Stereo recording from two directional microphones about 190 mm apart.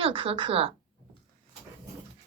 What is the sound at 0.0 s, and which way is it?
Speech, 30° right (ahead or behind).